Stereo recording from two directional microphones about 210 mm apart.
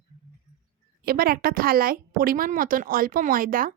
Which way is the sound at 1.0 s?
45° right (ahead or behind).